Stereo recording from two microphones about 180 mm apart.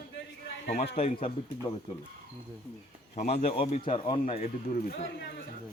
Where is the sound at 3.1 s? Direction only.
35° left (ahead or behind).